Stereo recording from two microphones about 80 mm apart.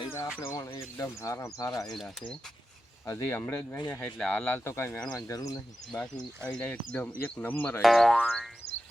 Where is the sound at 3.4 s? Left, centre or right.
Left.